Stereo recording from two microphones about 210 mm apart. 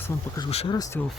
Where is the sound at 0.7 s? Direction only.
15° left (ahead or behind).